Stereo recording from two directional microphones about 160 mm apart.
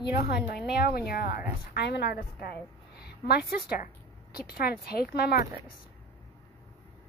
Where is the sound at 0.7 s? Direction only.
80° left.